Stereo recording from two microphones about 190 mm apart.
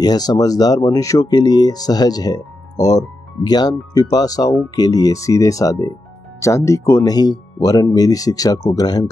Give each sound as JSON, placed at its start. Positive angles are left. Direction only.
{"t": 0.0, "sound": "speech", "side_deg": 20}